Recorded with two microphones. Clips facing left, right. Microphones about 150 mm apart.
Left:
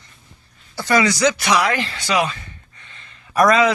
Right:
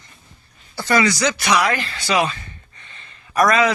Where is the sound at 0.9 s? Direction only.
10° left (ahead or behind).